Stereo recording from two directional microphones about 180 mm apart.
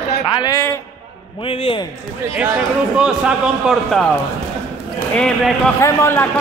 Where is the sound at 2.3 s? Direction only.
10° right (ahead or behind).